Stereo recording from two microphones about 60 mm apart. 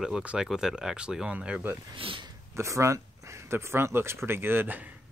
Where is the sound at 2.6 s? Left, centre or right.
Right.